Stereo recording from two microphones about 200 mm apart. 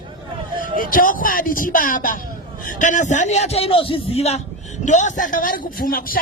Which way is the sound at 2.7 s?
40° left (ahead or behind).